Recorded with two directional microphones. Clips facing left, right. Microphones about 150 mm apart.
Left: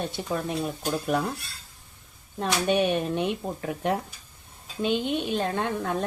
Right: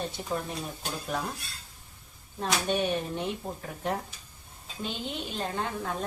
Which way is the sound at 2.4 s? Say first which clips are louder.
Left 5 dB; 70° left (ahead or behind).